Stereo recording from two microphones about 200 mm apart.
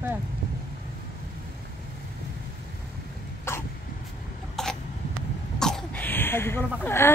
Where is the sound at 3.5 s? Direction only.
10° left (ahead or behind).